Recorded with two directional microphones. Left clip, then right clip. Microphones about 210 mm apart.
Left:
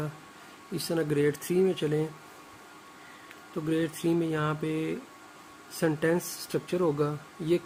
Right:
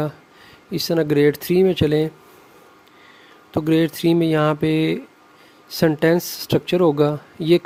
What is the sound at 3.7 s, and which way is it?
A man's voice, 50° right (ahead or behind).